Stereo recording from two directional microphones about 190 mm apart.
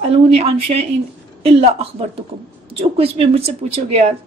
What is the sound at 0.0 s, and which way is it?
A woman's voice, 30° right (ahead or behind).